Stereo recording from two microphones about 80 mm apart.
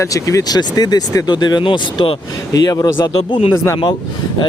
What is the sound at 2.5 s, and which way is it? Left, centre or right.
Speech, left.